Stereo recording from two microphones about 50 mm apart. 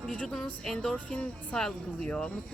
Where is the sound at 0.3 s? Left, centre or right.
Centre.